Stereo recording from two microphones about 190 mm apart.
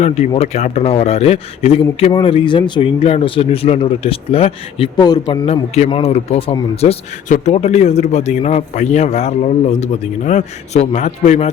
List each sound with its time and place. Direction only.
0.0 s speech: 35° left (ahead or behind)